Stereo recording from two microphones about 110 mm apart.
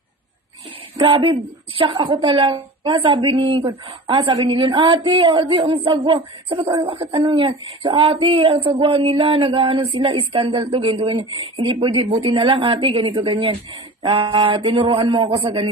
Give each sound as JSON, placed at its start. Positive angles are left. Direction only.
{"t": 0.9, "sound": "a woman's voice", "side_deg": -40}
{"t": 7.3, "sound": "speech", "side_deg": -50}